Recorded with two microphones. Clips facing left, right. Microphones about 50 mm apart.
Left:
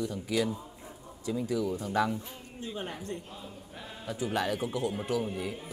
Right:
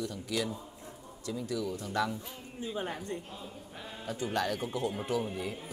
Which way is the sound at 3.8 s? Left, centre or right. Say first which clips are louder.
Left 1 dB; centre.